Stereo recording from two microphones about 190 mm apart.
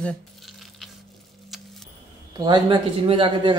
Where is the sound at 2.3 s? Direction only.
20° right (ahead or behind).